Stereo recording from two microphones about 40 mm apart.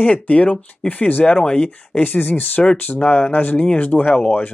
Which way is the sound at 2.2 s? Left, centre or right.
Left.